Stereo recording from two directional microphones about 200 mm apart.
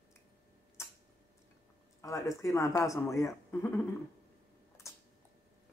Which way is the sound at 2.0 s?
15° left (ahead or behind).